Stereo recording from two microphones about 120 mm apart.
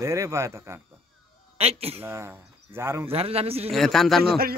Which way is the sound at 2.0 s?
20° right (ahead or behind).